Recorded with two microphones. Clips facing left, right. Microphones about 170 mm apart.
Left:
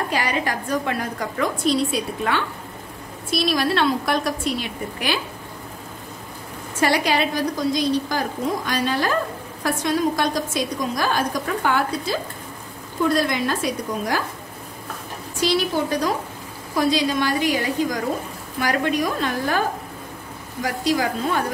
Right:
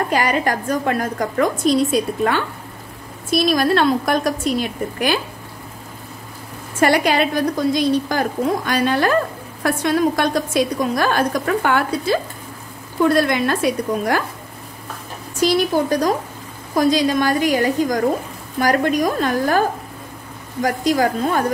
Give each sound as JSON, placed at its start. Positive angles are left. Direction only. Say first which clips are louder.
{"t": 0.1, "sound": "a woman's voice", "louder": "right 5 dB", "side_deg": -50}
{"t": 6.8, "sound": "a woman's voice", "louder": "right 4 dB", "side_deg": -55}
{"t": 15.4, "sound": "a woman's voice", "louder": "right 4 dB", "side_deg": -45}
{"t": 20.6, "sound": "a woman's voice", "louder": "right 4 dB", "side_deg": -45}